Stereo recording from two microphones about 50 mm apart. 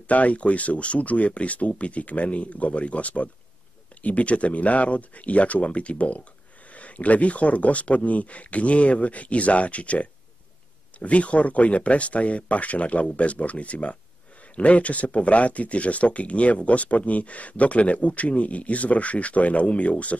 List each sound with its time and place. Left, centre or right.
0.1 s speech: left